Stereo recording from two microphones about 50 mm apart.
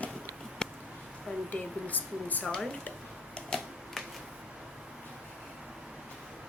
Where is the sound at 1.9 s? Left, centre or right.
Left.